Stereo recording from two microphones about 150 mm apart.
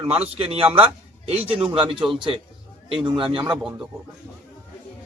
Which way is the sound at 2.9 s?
35° right (ahead or behind).